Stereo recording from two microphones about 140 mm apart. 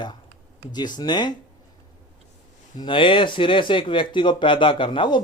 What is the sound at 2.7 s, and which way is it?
Speech, 35° left (ahead or behind).